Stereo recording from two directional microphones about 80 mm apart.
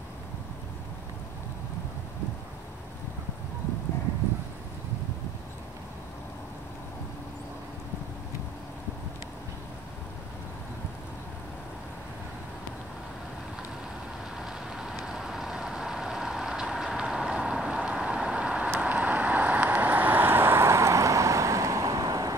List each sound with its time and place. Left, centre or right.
14.3 s vehicle: centre; by 22.3 s right